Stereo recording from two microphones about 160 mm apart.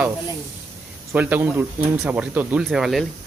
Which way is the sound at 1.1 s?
10° right (ahead or behind).